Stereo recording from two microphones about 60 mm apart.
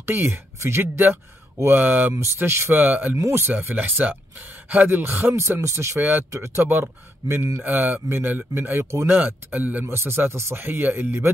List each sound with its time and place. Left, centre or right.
0.0 s speech: right
2.1 s speech: right
5.9 s speech: right
9.2 s speech: right
9.8 s speech: right